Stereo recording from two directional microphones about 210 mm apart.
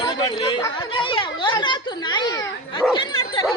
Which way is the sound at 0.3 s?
20° left (ahead or behind).